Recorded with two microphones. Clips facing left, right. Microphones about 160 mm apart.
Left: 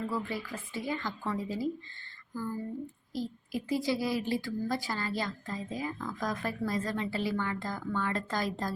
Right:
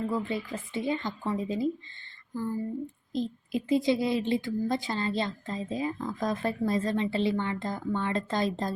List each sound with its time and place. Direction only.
0.1 s a woman's voice: 20° right (ahead or behind)